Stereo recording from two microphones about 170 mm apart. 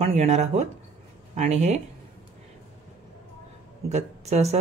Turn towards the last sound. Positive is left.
turn(degrees=-40)  # may be behind; listen again after turning